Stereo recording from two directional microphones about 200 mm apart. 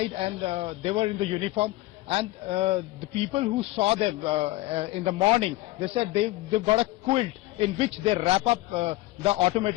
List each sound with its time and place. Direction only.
0.2 s a man's voice: 30° right (ahead or behind)